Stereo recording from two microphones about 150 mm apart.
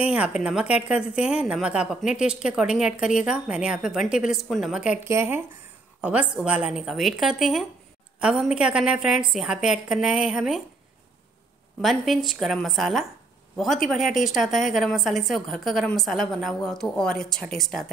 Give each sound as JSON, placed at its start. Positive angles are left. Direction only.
{"t": 0.1, "sound": "a woman's voice", "side_deg": -5}
{"t": 5.0, "sound": "a woman's voice", "side_deg": -15}
{"t": 11.8, "sound": "a woman's voice", "side_deg": 0}